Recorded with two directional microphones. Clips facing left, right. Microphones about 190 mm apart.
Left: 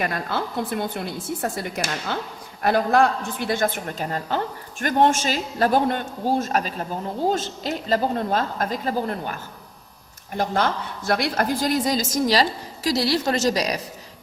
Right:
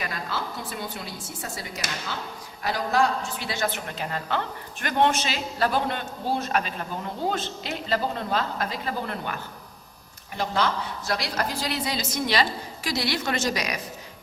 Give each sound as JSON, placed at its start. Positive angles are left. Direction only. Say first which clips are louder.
{"t": 0.0, "sound": "a woman's voice", "louder": "left 6 dB", "side_deg": 55}